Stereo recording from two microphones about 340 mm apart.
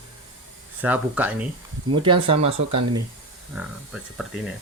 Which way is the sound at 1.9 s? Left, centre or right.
Centre.